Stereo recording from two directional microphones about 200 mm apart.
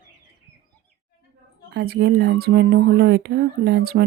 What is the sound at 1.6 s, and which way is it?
Speech, 55° right (ahead or behind).